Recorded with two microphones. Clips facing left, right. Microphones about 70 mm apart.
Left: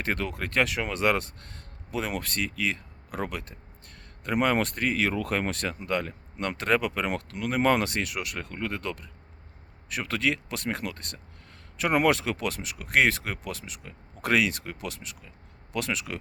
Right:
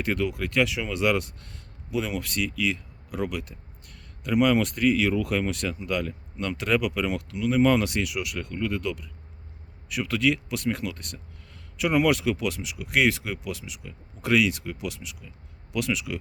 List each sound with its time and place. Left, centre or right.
0.0 s speech: left